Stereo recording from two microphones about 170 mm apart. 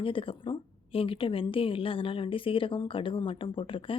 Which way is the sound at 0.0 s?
30° left (ahead or behind).